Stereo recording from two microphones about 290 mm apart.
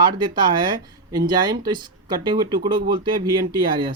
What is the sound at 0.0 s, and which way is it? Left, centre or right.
Speech, centre.